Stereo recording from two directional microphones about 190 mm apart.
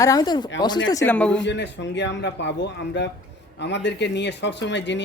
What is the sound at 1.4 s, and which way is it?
Speech, 65° left (ahead or behind).